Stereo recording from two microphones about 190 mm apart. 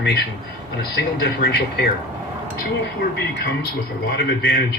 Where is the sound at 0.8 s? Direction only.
55° left (ahead or behind).